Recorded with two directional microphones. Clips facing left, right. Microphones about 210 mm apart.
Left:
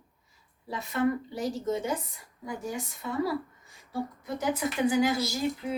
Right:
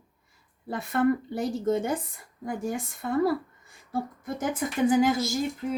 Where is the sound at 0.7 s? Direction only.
55° right (ahead or behind).